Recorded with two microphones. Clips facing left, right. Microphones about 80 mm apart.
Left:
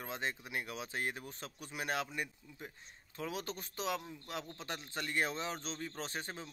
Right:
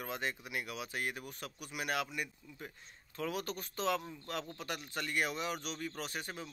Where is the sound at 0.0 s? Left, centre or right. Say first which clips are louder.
Right 1 dB; left.